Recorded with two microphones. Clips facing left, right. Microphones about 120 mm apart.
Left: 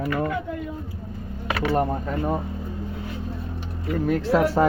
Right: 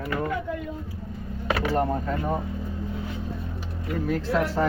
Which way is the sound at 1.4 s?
5° right (ahead or behind).